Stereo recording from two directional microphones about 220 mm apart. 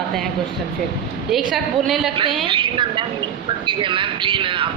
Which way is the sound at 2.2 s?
25° right (ahead or behind).